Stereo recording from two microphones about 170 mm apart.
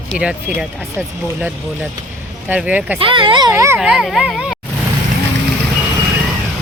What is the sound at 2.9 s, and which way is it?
Speech, 30° right (ahead or behind).